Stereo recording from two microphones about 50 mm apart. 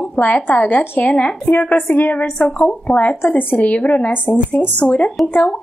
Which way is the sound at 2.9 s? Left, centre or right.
Left.